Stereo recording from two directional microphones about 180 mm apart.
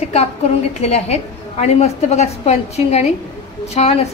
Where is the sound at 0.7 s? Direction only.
35° left (ahead or behind).